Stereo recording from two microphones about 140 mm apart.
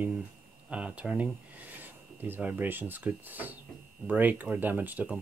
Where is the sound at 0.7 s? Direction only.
10° right (ahead or behind).